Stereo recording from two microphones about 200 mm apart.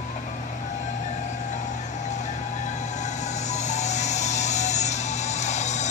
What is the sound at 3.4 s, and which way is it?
Music, 35° left (ahead or behind).